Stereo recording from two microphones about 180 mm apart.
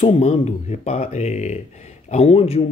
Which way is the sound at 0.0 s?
35° left (ahead or behind).